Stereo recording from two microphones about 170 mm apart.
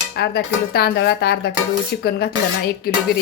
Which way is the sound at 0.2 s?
70° left (ahead or behind).